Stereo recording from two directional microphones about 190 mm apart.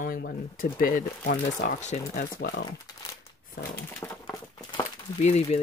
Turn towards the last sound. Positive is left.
turn(degrees=35)  # may be behind; listen again after turning